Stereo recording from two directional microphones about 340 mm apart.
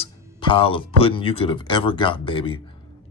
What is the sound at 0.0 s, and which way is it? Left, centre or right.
Speech, centre.